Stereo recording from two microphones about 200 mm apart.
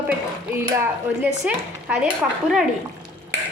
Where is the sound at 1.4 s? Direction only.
5° right (ahead or behind).